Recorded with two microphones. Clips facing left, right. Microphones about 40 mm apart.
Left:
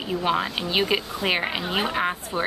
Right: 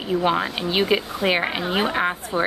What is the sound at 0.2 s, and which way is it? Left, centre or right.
A woman's voice, centre.